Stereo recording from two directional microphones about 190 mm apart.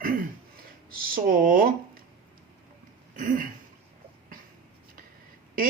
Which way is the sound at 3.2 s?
45° right (ahead or behind).